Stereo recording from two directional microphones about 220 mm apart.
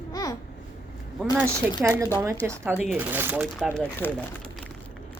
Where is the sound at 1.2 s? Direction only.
10° right (ahead or behind).